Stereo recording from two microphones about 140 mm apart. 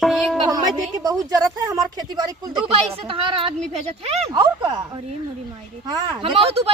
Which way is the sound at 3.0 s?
40° right (ahead or behind).